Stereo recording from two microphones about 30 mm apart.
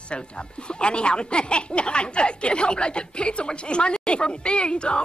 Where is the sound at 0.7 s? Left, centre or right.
Left.